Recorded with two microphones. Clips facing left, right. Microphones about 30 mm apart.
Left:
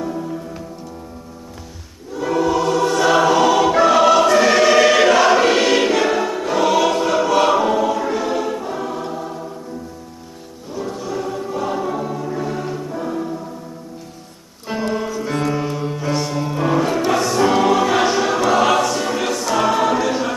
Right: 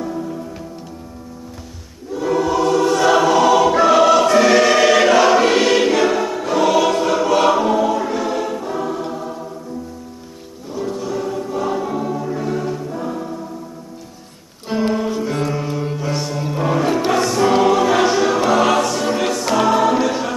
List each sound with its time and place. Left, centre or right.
0.0 s music: centre
2.1 s choir: centre
10.7 s choir: centre
15.2 s music: centre
18.5 s choir: centre